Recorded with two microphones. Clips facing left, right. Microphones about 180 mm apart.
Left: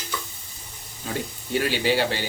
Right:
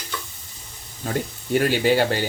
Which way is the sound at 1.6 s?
50° right (ahead or behind).